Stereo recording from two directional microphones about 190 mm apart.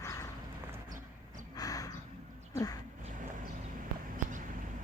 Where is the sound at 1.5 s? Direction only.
20° left (ahead or behind).